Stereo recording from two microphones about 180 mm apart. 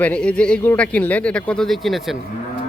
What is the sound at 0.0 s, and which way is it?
Speech, 5° left (ahead or behind).